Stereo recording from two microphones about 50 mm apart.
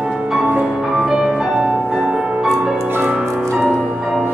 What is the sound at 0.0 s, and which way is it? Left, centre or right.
Music, centre.